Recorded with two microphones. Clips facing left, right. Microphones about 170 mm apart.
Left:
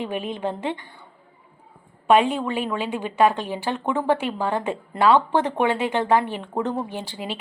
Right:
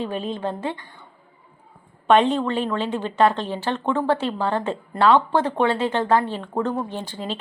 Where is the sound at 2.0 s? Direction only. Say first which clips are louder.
Right 1 dB; 10° left (ahead or behind).